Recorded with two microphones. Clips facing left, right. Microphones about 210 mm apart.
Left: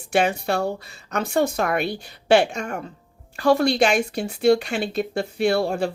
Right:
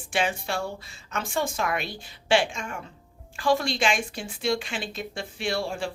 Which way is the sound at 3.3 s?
65° left (ahead or behind).